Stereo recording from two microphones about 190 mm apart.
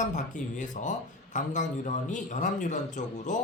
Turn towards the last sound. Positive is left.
turn(degrees=40)  # may be behind; listen again after turning